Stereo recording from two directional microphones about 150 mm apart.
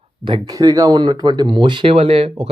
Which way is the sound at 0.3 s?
30° right (ahead or behind).